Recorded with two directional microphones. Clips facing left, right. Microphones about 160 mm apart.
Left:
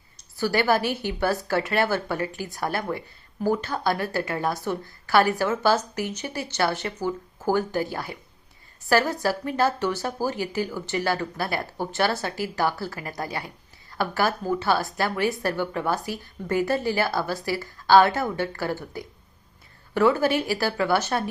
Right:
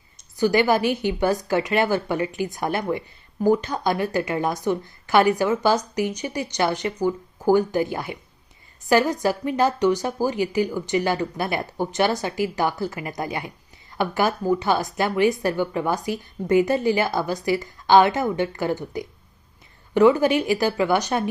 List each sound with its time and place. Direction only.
0.3 s a woman's voice: 15° right (ahead or behind)